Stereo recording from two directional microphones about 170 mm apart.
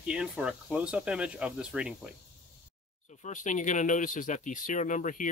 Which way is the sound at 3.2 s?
45° left (ahead or behind).